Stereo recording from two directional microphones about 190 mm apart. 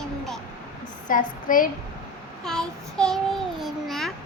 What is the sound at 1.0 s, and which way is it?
Speech, 45° left (ahead or behind).